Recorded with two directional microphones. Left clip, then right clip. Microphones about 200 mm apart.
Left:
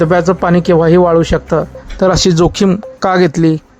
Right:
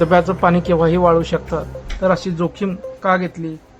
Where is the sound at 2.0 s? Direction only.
45° left (ahead or behind).